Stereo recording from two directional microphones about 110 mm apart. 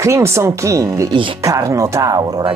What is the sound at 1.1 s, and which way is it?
Speech, 50° right (ahead or behind).